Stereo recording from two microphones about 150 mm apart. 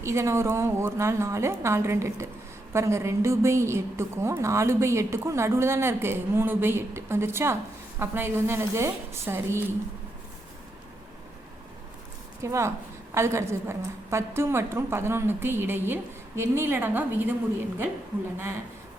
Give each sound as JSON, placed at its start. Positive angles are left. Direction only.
{"t": 0.0, "sound": "a woman's voice", "side_deg": -20}
{"t": 12.4, "sound": "a woman's voice", "side_deg": -20}